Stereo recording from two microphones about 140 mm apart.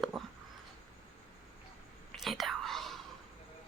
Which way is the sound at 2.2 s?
Centre (ahead or behind).